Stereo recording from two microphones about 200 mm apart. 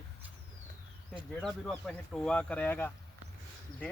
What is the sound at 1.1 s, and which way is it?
Speech, centre (ahead or behind).